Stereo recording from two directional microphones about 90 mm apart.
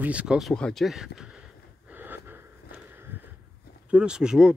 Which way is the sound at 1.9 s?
20° right (ahead or behind).